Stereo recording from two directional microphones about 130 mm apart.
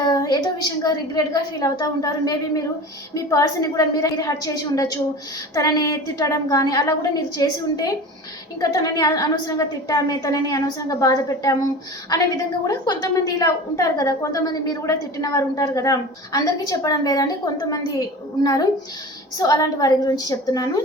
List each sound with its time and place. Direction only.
0.0 s a woman's voice: 30° left (ahead or behind)
19.4 s a woman's voice: 30° left (ahead or behind)